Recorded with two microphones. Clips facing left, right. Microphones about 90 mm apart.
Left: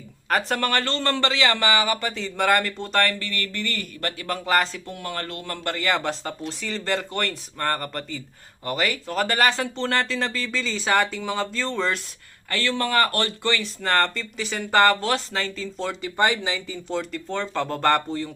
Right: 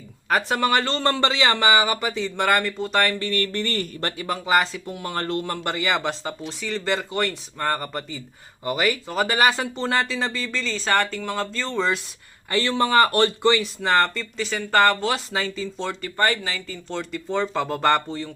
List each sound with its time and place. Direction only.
0.3 s speech: 5° right (ahead or behind)
3.0 s speech: 15° right (ahead or behind)
3.2 s speech: 35° right (ahead or behind)
4.3 s speech: 5° right (ahead or behind)
5.0 s speech: 30° right (ahead or behind)
5.7 s speech: 5° right (ahead or behind)
12.5 s speech: 20° right (ahead or behind)
13.8 s speech: 5° right (ahead or behind); by 16.7 s 20° left (ahead or behind)
16.9 s speech: centre (ahead or behind)
17.2 s speech: 10° right (ahead or behind)